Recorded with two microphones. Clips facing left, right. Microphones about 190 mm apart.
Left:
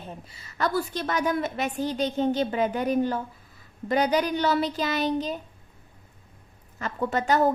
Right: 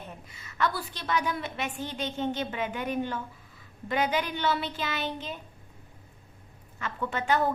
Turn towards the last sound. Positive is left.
turn(degrees=40)  # may be behind; listen again after turning